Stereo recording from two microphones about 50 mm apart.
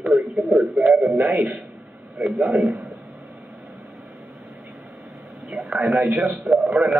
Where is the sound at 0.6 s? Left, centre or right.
Centre.